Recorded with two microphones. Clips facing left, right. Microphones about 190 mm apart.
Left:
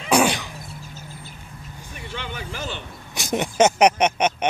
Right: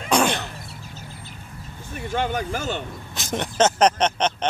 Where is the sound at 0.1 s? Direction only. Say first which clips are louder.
Left 2 dB; 10° left (ahead or behind).